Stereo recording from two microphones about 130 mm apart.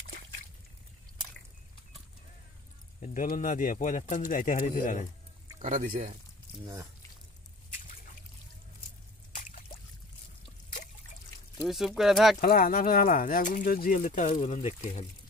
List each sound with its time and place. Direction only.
3.0 s speech: 75° left (ahead or behind)
5.6 s speech: 75° right (ahead or behind)
6.6 s speech: 25° right (ahead or behind)
11.5 s speech: centre (ahead or behind)
12.4 s speech: 90° left
14.4 s speech: 60° left (ahead or behind)